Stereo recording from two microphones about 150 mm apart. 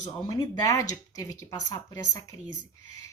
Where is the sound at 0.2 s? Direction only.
25° left (ahead or behind).